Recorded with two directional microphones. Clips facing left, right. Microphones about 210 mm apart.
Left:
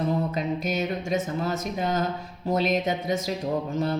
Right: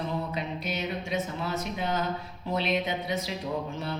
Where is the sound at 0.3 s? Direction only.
45° left (ahead or behind).